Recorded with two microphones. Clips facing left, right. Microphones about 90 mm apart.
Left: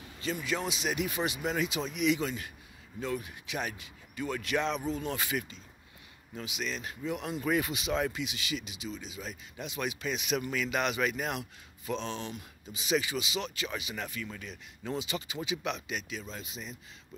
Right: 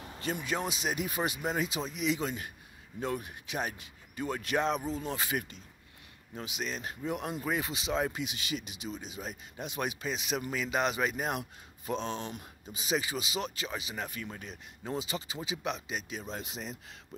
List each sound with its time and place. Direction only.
0.0 s a sound: 45° right (ahead or behind)
0.7 s speech: 40° right (ahead or behind)
7.4 s speech: 25° right (ahead or behind)
8.1 s speech: 45° right (ahead or behind)
16.3 s speech: 65° right (ahead or behind)